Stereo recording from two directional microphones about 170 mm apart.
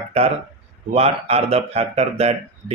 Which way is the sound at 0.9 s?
40° right (ahead or behind).